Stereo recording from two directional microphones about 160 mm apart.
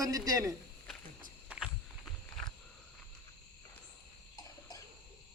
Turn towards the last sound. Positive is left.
turn(degrees=20)  # may be behind; listen again after turning